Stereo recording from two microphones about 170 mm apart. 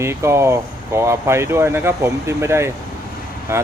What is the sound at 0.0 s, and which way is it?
A man's voice, 15° right (ahead or behind).